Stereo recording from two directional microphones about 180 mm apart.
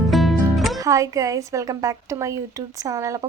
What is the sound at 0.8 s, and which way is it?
A woman's voice, 20° right (ahead or behind).